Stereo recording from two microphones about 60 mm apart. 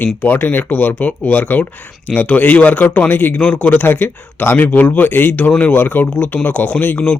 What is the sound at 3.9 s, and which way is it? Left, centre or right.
Speech, left.